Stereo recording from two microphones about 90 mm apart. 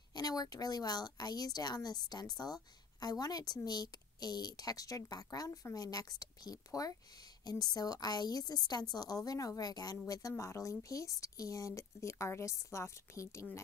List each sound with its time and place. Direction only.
0.1 s a woman's voice: 45° left (ahead or behind)
10.3 s speech: 30° left (ahead or behind)